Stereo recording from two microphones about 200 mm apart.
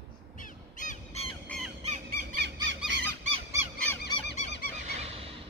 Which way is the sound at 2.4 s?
65° right (ahead or behind).